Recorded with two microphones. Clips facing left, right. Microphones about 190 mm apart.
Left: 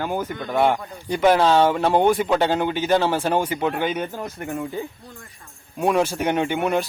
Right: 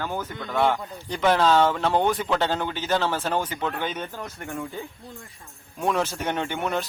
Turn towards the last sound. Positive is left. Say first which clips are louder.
# left 6 dB
turn(degrees=15)  # may be behind; listen again after turning